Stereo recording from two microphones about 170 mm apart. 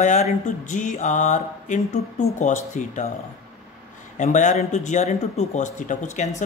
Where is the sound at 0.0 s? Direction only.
45° left (ahead or behind).